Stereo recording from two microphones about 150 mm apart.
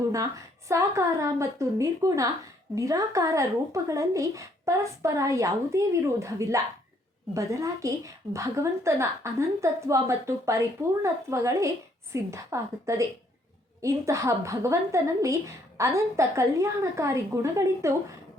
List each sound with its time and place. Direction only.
0.7 s a woman's voice: 20° right (ahead or behind)